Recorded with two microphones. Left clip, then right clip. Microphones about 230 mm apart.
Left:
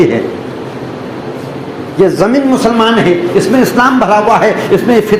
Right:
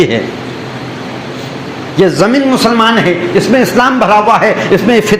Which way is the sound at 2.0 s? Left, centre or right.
Right.